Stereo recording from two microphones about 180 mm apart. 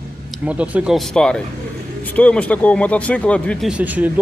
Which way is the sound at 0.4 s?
5° right (ahead or behind).